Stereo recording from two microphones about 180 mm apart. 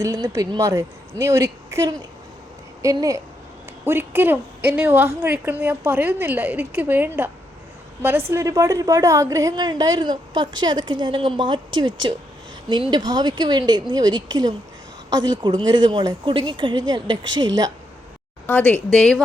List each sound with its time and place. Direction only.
0.0 s a woman's voice: 20° right (ahead or behind)
18.4 s speech: 10° left (ahead or behind)